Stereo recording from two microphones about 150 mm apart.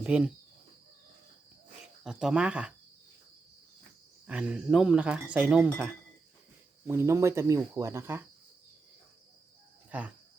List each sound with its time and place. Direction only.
0.0 s speech: 5° right (ahead or behind)
1.8 s speech: 5° right (ahead or behind)
4.3 s speech: 10° right (ahead or behind)
6.8 s speech: 15° right (ahead or behind)
9.9 s speech: 10° right (ahead or behind)